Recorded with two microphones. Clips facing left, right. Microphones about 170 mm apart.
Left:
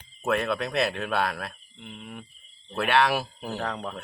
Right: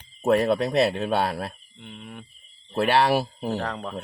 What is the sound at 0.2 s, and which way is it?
Speech, 35° right (ahead or behind).